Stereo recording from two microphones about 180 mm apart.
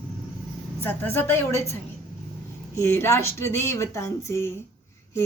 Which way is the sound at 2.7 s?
15° left (ahead or behind).